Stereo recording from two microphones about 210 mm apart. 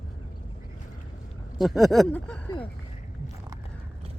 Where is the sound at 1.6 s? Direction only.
Centre (ahead or behind).